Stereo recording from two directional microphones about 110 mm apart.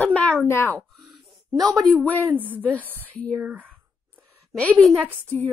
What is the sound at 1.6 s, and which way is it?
Speech, 30° right (ahead or behind).